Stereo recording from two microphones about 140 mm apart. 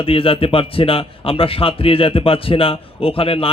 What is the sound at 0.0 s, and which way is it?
A man's voice, 40° left (ahead or behind).